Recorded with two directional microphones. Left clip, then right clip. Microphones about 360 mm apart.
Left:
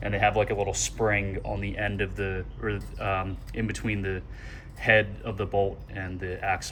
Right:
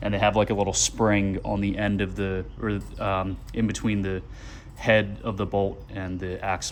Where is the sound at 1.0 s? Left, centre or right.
Right.